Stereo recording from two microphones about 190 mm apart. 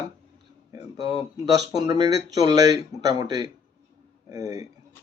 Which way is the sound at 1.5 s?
20° right (ahead or behind).